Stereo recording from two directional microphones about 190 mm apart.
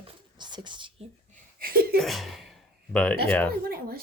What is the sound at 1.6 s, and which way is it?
Speech, 50° right (ahead or behind).